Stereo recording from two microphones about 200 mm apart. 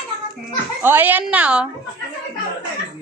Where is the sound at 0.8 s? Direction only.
10° right (ahead or behind).